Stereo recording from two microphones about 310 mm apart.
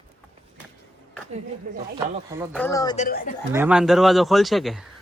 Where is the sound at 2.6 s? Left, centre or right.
Centre.